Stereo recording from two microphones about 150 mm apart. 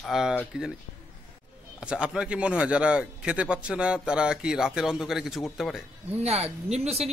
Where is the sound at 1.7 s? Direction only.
5° right (ahead or behind).